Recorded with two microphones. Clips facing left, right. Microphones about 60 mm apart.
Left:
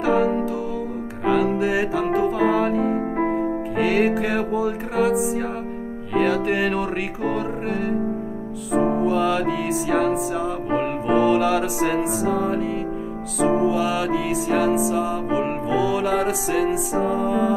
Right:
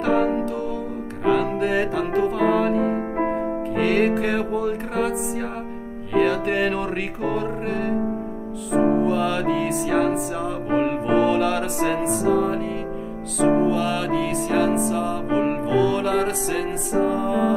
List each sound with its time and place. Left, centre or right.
0.0 s music: centre